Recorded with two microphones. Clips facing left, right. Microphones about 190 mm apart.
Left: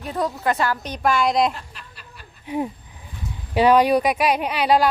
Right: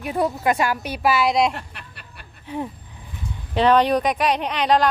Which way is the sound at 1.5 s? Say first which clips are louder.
Right 3 dB; 60° right (ahead or behind).